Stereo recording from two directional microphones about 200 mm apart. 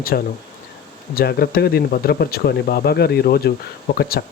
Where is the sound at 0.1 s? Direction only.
50° left (ahead or behind).